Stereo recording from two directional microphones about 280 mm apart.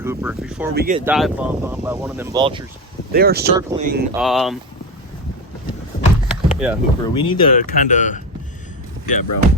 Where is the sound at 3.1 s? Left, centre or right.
Right.